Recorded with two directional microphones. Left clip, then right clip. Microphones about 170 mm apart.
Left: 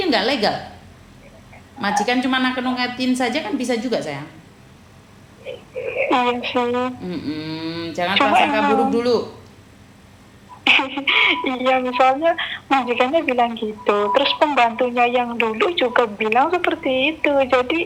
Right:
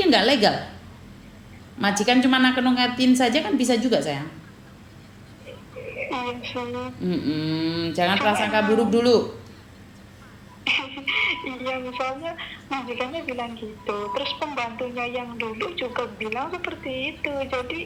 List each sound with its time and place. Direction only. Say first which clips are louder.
0.0 s a woman's voice: even; 45° right (ahead or behind)
1.8 s a woman's voice: left 1 dB; 45° right (ahead or behind)
5.5 s a sound: left 10 dB; 50° left (ahead or behind)
7.0 s a woman's voice: right 1 dB; 40° right (ahead or behind)
10.6 s a woman's voice: left 9 dB; 50° left (ahead or behind)